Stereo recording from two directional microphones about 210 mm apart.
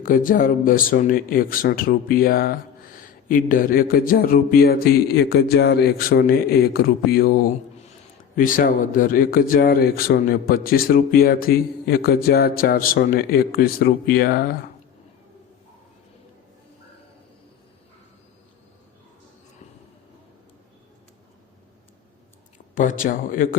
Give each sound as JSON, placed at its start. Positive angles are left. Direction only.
{"t": 0.0, "sound": "speech", "side_deg": 40}
{"t": 22.7, "sound": "speech", "side_deg": 40}